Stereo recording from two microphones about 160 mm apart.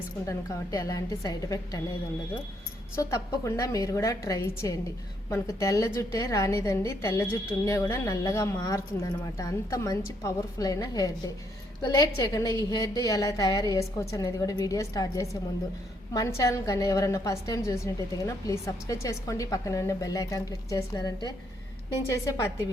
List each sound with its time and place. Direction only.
0.3 s a woman's voice: 20° left (ahead or behind)
2.9 s a woman's voice: 20° left (ahead or behind)
12.1 s a woman's voice: 25° left (ahead or behind)